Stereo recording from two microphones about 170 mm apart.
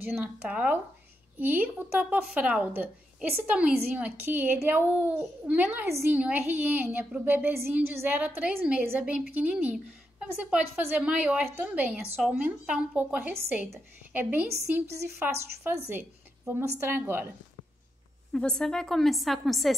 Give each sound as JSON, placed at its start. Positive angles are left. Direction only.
{"t": 0.0, "sound": "a woman's voice", "side_deg": -10}
{"t": 18.3, "sound": "a woman's voice", "side_deg": 5}